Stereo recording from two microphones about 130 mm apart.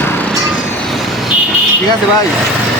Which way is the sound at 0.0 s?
15° left (ahead or behind).